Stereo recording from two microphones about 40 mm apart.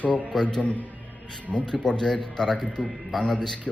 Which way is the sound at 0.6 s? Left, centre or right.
Left.